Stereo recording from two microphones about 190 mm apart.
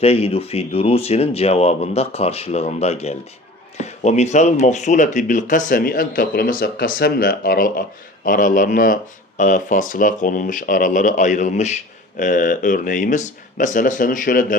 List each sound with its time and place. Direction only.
0.0 s speech: 30° left (ahead or behind)